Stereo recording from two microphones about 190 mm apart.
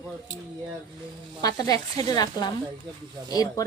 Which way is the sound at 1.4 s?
20° left (ahead or behind).